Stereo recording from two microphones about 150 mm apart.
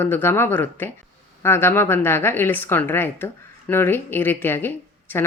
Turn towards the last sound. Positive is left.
turn(degrees=15)  # may be behind; listen again after turning